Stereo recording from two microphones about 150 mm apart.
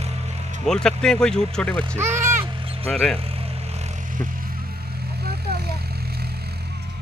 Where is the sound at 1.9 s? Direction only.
15° right (ahead or behind).